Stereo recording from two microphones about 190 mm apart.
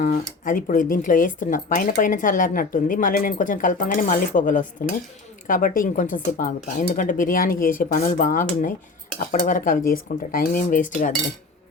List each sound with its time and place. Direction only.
0.0 s speech: 40° left (ahead or behind)